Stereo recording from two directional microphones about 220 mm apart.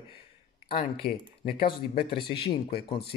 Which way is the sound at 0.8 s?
45° left (ahead or behind).